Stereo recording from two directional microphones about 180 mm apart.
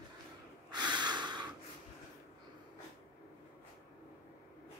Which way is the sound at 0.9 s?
25° right (ahead or behind).